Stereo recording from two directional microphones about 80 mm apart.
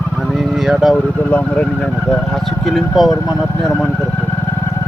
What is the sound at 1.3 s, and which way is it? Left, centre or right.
Speech, centre.